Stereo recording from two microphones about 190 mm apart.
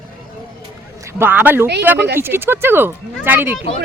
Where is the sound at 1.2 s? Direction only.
10° right (ahead or behind).